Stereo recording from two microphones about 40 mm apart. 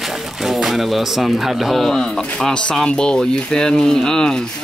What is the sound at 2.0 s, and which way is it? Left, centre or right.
Speech, centre.